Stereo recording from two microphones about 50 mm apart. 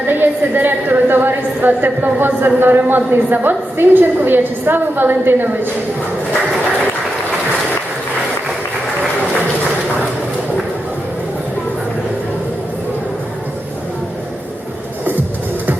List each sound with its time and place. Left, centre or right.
0.1 s a woman's voice: right